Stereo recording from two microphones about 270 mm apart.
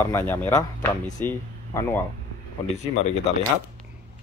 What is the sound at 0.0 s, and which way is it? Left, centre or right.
Speech, centre.